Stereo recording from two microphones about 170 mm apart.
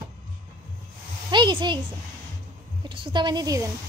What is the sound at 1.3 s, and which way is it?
Speech, 25° right (ahead or behind).